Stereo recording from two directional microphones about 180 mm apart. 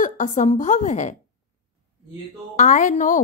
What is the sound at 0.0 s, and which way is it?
A woman's voice, 45° left (ahead or behind).